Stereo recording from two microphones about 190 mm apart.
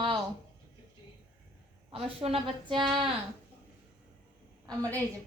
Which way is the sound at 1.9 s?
30° right (ahead or behind).